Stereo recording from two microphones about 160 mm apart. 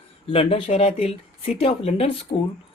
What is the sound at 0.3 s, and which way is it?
Speech, 35° left (ahead or behind).